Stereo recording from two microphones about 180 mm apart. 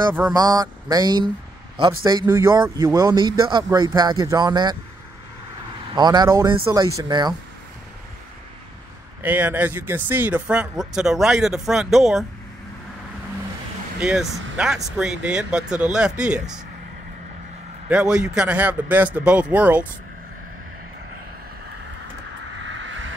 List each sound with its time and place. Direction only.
0.3 s speech: 20° right (ahead or behind)
5.9 s speech: 25° right (ahead or behind)
9.2 s speech: 10° right (ahead or behind)
13.9 s speech: 5° right (ahead or behind)
17.8 s a man's voice: 5° right (ahead or behind)